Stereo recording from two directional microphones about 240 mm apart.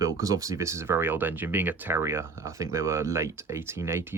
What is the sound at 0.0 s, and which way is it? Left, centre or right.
Speech, centre.